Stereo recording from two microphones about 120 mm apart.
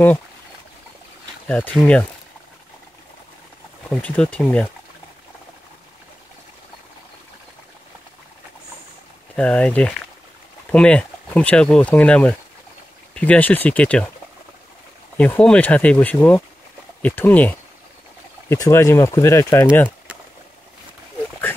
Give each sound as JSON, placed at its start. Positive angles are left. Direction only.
{"t": 1.5, "sound": "speech", "side_deg": 10}
{"t": 3.9, "sound": "speech", "side_deg": 15}
{"t": 9.3, "sound": "speech", "side_deg": 10}
{"t": 15.1, "sound": "speech", "side_deg": 10}